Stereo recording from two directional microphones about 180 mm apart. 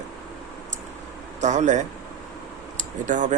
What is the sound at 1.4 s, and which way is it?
Speech, 40° right (ahead or behind).